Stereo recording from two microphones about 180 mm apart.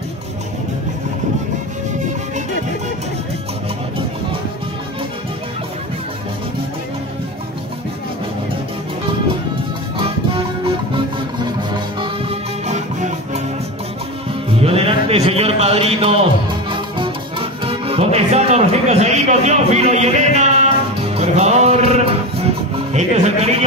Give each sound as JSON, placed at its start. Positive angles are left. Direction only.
{"t": 9.9, "sound": "music", "side_deg": -30}
{"t": 14.5, "sound": "music", "side_deg": -30}
{"t": 22.9, "sound": "speech", "side_deg": -40}